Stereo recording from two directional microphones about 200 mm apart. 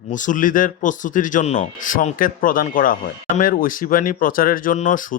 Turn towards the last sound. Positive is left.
turn(degrees=40)  # may be behind; listen again after turning